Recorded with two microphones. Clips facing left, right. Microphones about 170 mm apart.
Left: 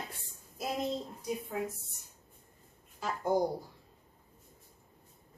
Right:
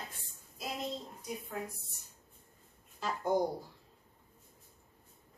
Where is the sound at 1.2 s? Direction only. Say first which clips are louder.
Left 5 dB; 25° left (ahead or behind).